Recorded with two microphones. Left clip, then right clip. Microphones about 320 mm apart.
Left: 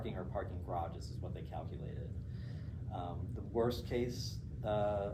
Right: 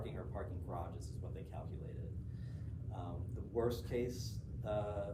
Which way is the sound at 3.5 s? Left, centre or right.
Centre.